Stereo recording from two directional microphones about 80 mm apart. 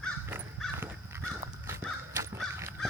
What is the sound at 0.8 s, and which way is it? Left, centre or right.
Crow, right.